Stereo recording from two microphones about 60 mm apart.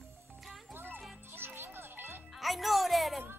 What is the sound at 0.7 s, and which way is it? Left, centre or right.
Music, right.